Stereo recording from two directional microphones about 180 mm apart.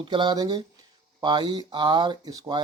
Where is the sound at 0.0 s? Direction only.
25° right (ahead or behind).